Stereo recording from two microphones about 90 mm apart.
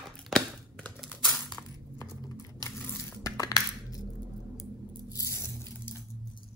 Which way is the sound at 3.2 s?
40° left (ahead or behind).